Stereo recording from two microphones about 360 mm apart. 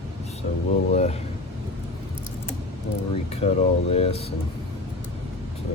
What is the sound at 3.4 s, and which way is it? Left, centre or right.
Speech, centre.